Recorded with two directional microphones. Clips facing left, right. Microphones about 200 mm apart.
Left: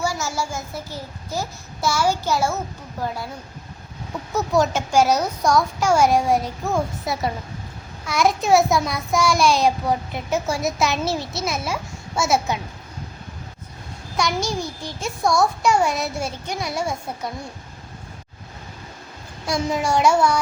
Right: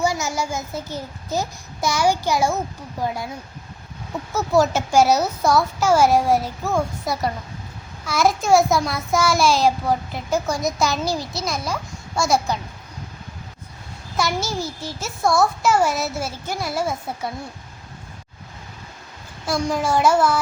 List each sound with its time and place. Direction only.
0.0 s a child's voice: 20° right (ahead or behind)
4.3 s child singing: centre (ahead or behind)
14.2 s child singing: 5° right (ahead or behind)
19.5 s child singing: centre (ahead or behind)